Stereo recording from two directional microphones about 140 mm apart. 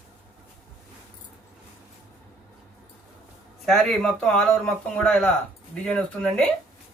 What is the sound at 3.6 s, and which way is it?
A man's voice, centre (ahead or behind).